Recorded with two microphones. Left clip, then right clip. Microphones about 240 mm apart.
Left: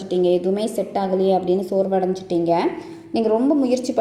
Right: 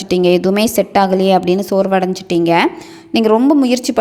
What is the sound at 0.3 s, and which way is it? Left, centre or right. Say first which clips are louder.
A woman's voice: right 9 dB; right.